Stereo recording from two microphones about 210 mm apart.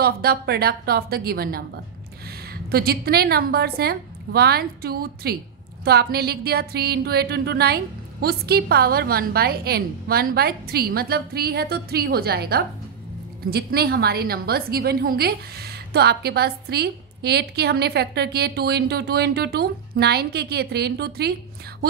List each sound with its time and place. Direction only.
0.0 s a woman's voice: 45° right (ahead or behind)